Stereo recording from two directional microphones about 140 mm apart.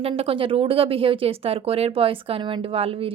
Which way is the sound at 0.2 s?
40° right (ahead or behind).